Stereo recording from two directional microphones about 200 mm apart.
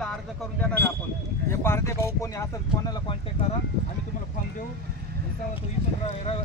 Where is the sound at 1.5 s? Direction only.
10° left (ahead or behind).